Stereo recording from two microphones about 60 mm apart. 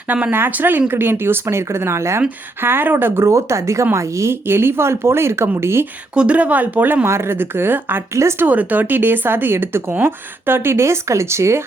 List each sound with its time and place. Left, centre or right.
0.1 s speech: right
0.3 s speech: right
2.6 s speech: right
3.2 s speech: right
4.4 s speech: right
6.1 s speech: right
8.1 s speech: right
8.4 s speech: right